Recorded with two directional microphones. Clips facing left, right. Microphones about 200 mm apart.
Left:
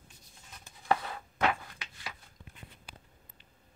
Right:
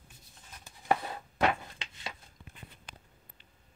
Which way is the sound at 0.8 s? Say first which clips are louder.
Even; 25° right (ahead or behind).